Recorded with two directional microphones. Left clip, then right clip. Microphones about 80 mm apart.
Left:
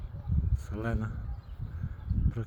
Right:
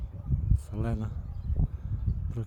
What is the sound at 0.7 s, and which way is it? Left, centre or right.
Speech, right.